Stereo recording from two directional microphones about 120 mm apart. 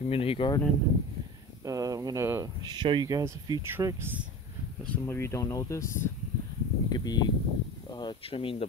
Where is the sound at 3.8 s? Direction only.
20° right (ahead or behind).